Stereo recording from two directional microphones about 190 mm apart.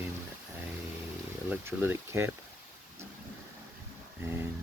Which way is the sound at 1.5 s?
10° right (ahead or behind).